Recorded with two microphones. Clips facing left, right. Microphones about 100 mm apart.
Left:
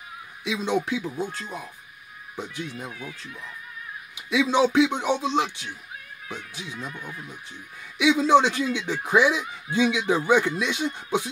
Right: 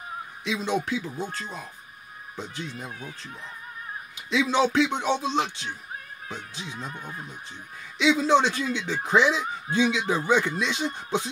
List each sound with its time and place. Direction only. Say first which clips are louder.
0.5 s speech: left 2 dB; 15° left (ahead or behind)
2.9 s speech: left 1 dB; 35° right (ahead or behind)
4.3 s speech: left 2 dB; 15° left (ahead or behind)
6.9 s speech: even; 35° right (ahead or behind)
8.0 s speech: left 2 dB; 15° left (ahead or behind)